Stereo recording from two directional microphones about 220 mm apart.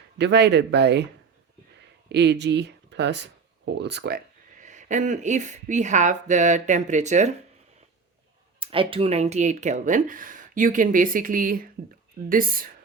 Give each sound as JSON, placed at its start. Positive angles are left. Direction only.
{"t": 0.2, "sound": "speech", "side_deg": -50}
{"t": 2.0, "sound": "speech", "side_deg": -50}
{"t": 4.6, "sound": "speech", "side_deg": -35}
{"t": 8.5, "sound": "speech", "side_deg": -25}